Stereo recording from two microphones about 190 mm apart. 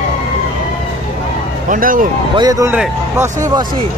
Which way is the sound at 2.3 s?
20° right (ahead or behind).